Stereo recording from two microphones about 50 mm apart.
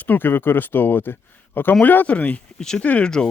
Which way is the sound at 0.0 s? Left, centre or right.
Left.